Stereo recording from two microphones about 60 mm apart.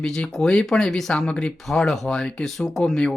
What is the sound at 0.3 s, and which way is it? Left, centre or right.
Speech, centre.